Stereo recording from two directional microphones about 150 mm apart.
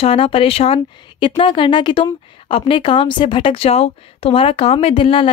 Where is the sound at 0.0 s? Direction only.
40° left (ahead or behind).